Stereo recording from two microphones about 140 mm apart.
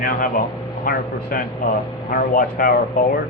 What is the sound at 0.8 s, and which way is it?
A man's voice, 90° left.